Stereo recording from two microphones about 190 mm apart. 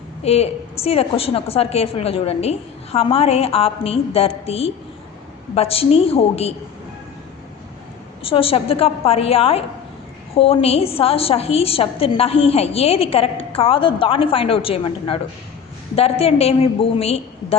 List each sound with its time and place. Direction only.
0.2 s a woman's voice: 35° left (ahead or behind)
8.2 s a woman's voice: 30° left (ahead or behind)